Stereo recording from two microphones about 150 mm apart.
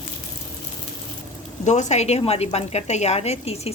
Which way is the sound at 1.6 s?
50° left (ahead or behind).